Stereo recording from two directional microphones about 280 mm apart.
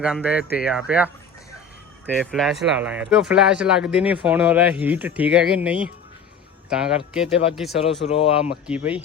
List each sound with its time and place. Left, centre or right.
0.0 s speech: centre
8.0 s speech: left
8.4 s speech: centre